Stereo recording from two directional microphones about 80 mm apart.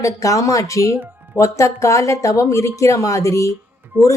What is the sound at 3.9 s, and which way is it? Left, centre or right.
Speech, right.